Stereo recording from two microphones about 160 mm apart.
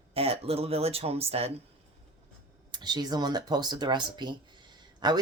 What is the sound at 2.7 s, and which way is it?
Speech, 25° right (ahead or behind).